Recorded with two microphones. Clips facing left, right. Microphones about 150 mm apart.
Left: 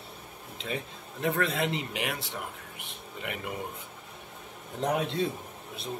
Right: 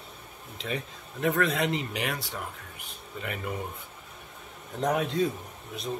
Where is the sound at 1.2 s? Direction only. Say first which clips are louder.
Right 2 dB; 30° left (ahead or behind).